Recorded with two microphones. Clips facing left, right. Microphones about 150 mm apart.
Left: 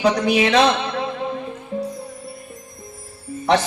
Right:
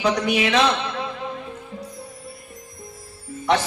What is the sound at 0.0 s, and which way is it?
Speech, 35° left (ahead or behind).